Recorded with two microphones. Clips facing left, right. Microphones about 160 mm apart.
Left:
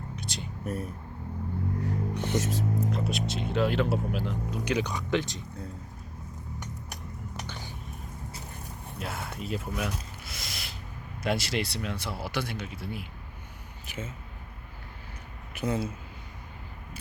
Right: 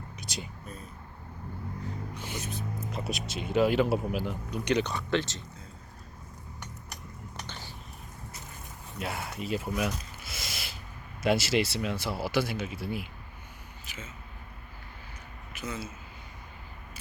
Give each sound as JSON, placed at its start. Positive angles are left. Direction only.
{"t": 0.6, "sound": "speech", "side_deg": 80}
{"t": 1.8, "sound": "a sound", "side_deg": 75}
{"t": 2.4, "sound": "speech", "side_deg": 90}
{"t": 2.9, "sound": "speech", "side_deg": 0}
{"t": 7.4, "sound": "a sound", "side_deg": 10}
{"t": 9.0, "sound": "speech", "side_deg": 0}
{"t": 13.8, "sound": "speech", "side_deg": 55}
{"t": 15.5, "sound": "speech", "side_deg": 55}